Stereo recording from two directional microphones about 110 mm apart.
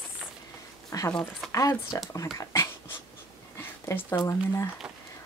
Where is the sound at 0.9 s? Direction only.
30° left (ahead or behind).